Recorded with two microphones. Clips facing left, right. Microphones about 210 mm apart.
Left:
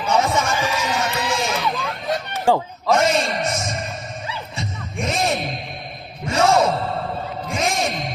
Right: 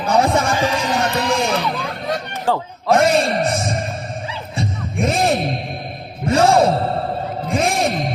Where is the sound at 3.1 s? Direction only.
35° right (ahead or behind).